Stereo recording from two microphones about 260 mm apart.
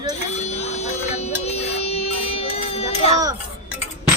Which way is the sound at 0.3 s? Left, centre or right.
Left.